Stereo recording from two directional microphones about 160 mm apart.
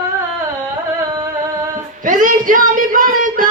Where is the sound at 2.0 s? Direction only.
55° right (ahead or behind).